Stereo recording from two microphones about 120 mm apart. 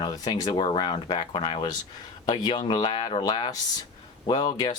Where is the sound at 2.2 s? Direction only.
35° left (ahead or behind).